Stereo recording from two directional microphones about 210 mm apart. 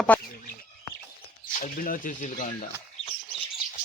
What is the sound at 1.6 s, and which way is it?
Speech, 40° left (ahead or behind).